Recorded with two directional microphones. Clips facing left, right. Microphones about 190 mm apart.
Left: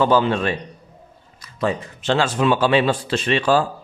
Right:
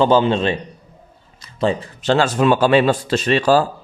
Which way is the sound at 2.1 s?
45° right (ahead or behind).